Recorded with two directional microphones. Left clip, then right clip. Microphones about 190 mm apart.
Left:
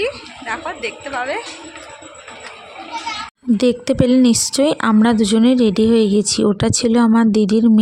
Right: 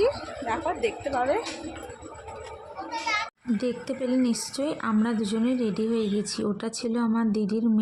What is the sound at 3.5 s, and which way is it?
A woman's voice, 55° left (ahead or behind).